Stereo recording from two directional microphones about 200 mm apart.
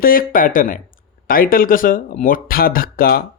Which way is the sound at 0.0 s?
45° left (ahead or behind).